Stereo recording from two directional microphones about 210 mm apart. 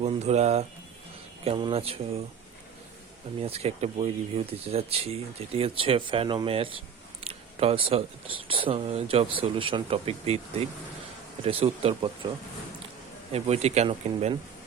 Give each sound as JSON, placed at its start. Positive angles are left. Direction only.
{"t": 0.0, "sound": "speech", "side_deg": -30}
{"t": 3.4, "sound": "speech", "side_deg": -30}
{"t": 13.3, "sound": "speech", "side_deg": -30}